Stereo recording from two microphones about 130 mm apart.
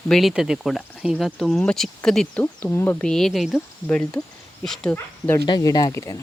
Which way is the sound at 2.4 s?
15° left (ahead or behind).